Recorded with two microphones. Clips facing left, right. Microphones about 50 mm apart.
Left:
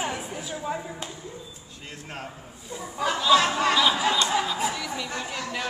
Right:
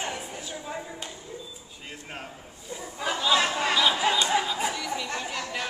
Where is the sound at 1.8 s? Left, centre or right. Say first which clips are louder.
Left 2 dB; centre.